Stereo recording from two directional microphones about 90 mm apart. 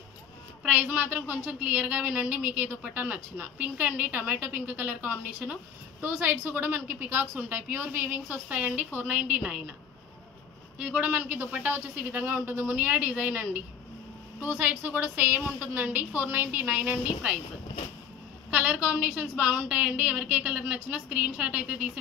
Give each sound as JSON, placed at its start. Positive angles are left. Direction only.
{"t": 0.7, "sound": "a woman's voice", "side_deg": -15}
{"t": 10.8, "sound": "a man's voice", "side_deg": -15}
{"t": 14.6, "sound": "a man's voice", "side_deg": -20}
{"t": 18.5, "sound": "a woman's voice", "side_deg": -15}